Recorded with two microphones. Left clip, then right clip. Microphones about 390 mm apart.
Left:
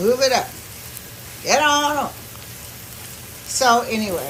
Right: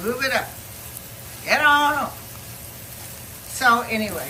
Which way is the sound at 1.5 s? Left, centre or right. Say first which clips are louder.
Even; centre.